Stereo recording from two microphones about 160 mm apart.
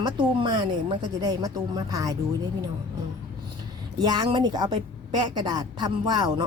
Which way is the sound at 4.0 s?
25° right (ahead or behind).